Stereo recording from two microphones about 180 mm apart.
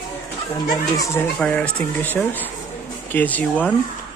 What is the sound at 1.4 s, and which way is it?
Speech, 5° left (ahead or behind).